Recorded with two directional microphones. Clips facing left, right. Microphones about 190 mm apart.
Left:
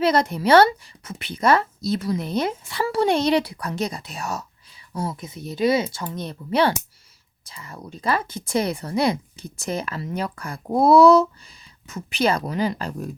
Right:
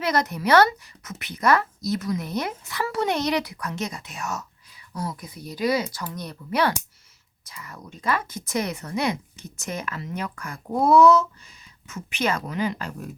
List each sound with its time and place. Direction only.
0.0 s speech: 30° left (ahead or behind)